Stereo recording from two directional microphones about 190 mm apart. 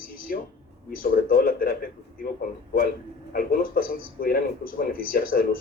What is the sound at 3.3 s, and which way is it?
A man's voice, 50° left (ahead or behind).